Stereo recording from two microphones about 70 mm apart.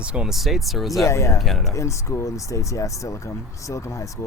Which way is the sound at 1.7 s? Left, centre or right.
Left.